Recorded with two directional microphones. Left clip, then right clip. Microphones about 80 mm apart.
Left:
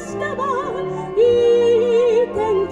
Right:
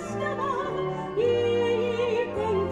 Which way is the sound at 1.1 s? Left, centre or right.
Left.